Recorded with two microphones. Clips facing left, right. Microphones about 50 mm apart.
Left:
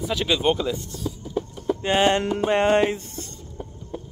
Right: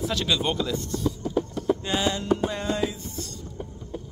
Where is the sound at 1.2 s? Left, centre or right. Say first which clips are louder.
Right 1 dB; right.